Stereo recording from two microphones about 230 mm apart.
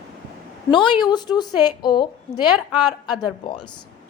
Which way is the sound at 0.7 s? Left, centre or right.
Centre.